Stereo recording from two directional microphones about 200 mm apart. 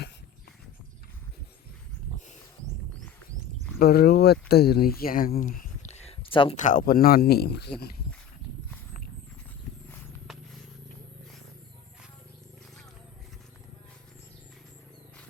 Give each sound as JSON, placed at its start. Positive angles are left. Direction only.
{"t": 3.8, "sound": "speech", "side_deg": 50}
{"t": 6.6, "sound": "speech", "side_deg": 40}